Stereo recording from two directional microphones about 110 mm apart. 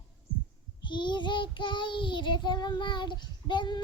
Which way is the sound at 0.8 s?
45° left (ahead or behind).